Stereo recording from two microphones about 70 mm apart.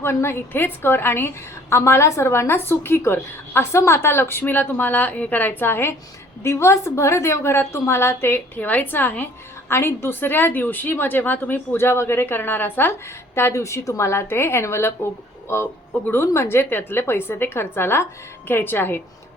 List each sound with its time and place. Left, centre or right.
0.0 s a woman's voice: left